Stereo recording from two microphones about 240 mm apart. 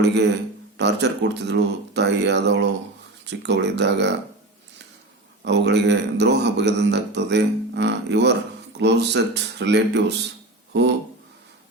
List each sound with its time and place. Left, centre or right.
0.0 s a man's voice: right
5.5 s a man's voice: right